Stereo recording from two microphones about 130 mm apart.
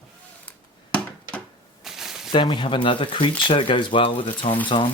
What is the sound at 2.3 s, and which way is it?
Speech, 40° left (ahead or behind).